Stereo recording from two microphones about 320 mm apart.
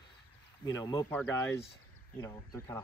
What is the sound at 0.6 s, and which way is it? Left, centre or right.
Speech, centre.